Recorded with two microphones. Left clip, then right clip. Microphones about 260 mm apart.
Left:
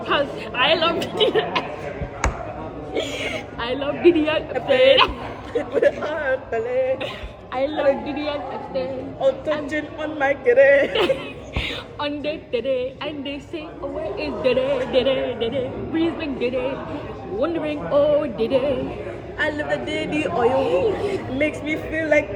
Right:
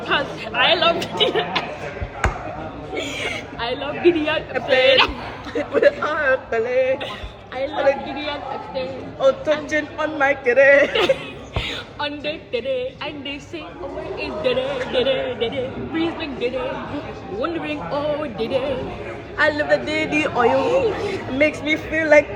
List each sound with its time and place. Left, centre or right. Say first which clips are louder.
0.1 s a man's voice: even; centre
2.9 s a man's voice: even; left
5.5 s speech: right 2 dB; centre
7.5 s a woman's voice: even; left
9.7 s speech: right 4 dB; centre
11.5 s a woman's voice: right 1 dB; centre
19.4 s speech: right 6 dB; centre
20.6 s a man's voice: right 1 dB; centre
21.3 s speech: right 8 dB; centre